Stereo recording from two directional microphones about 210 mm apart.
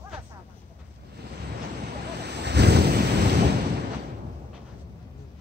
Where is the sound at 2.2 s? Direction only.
50° right (ahead or behind).